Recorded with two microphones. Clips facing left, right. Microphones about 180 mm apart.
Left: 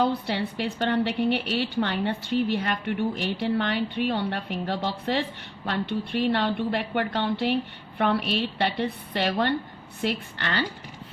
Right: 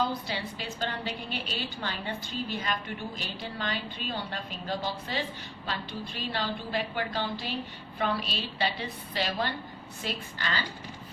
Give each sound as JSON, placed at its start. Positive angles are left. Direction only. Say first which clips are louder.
{"t": 0.0, "sound": "a woman's voice", "louder": "left 6 dB", "side_deg": 65}